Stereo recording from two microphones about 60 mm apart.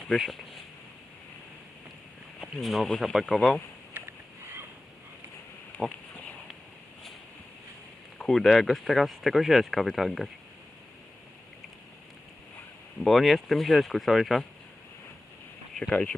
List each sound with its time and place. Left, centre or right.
0.1 s speech: centre
2.4 s speech: centre
8.2 s speech: centre
13.0 s speech: centre
15.9 s speech: left